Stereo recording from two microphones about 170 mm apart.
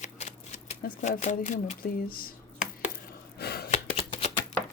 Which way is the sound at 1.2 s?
45° left (ahead or behind).